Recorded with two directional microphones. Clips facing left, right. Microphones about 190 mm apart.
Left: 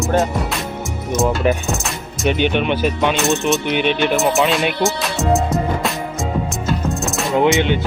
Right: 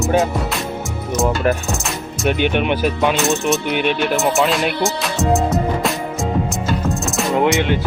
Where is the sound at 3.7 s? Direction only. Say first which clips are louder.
Left 1 dB; 45° right (ahead or behind).